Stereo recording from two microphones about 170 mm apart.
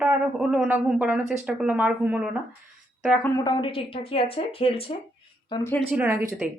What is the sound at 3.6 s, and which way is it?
Speech, 35° left (ahead or behind).